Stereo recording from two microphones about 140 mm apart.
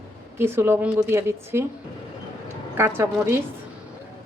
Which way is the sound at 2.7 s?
20° right (ahead or behind).